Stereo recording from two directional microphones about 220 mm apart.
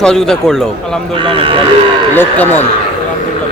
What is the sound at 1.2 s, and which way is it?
Speech, 25° right (ahead or behind).